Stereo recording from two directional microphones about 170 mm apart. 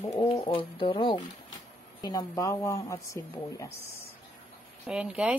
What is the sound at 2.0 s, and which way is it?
Speech, 20° left (ahead or behind).